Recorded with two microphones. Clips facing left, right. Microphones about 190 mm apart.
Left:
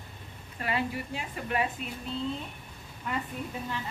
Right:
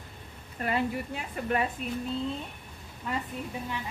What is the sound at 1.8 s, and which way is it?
Speech, 45° right (ahead or behind).